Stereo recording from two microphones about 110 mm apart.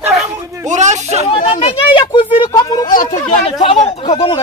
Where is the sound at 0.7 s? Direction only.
90° right.